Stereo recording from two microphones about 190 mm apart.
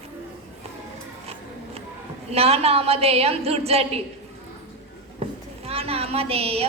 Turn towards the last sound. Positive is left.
turn(degrees=-30)  # may be behind; listen again after turning